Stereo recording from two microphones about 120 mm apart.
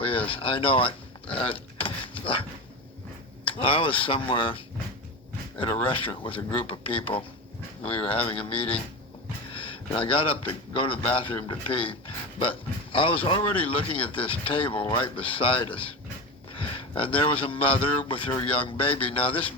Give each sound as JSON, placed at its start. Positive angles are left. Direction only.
{"t": 0.3, "sound": "speech", "side_deg": 45}
{"t": 1.4, "sound": "power windows", "side_deg": 50}
{"t": 3.4, "sound": "speech", "side_deg": 50}
{"t": 5.8, "sound": "speech", "side_deg": 45}